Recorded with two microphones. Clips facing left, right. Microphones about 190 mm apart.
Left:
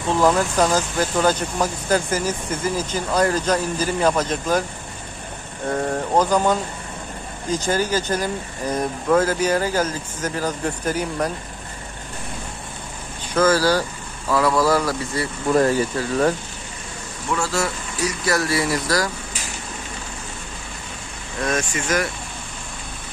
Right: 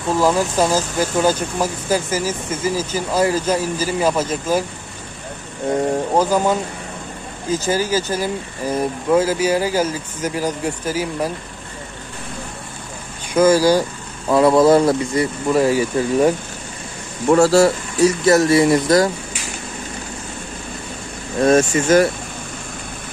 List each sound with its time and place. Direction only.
0.2 s speech: 10° right (ahead or behind)
6.1 s speech: 10° right (ahead or behind)
7.5 s speech: 5° right (ahead or behind)
13.3 s speech: 15° right (ahead or behind)
15.5 s speech: 10° right (ahead or behind)
17.3 s speech: 35° right (ahead or behind)
21.4 s speech: 25° right (ahead or behind)